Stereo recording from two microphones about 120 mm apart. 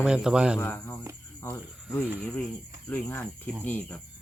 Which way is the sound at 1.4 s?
25° left (ahead or behind).